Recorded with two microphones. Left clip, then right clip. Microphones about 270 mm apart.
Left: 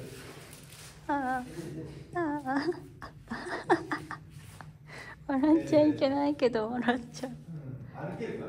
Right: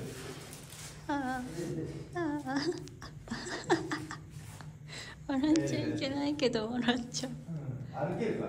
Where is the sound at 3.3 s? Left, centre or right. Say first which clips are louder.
Left 3 dB; centre.